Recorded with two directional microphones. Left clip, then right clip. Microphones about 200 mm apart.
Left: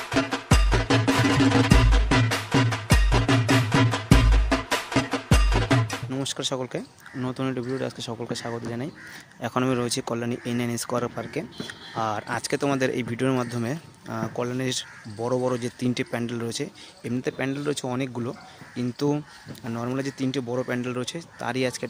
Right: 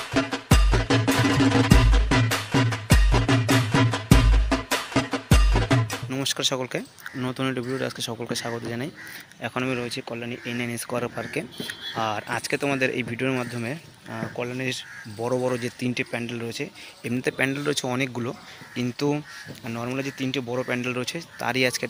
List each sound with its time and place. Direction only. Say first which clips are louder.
0.1 s music: even; centre (ahead or behind)
9.4 s speech: left 2 dB; 20° left (ahead or behind)
17.0 s speech: right 4 dB; 5° left (ahead or behind)